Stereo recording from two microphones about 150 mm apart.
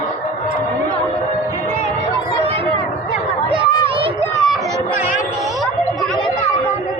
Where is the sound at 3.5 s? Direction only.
35° right (ahead or behind).